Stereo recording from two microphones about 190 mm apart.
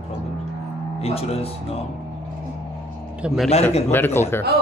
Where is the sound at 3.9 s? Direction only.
10° left (ahead or behind).